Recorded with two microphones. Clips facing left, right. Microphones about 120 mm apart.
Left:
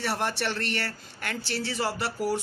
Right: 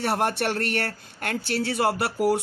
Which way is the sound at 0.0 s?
55° right (ahead or behind).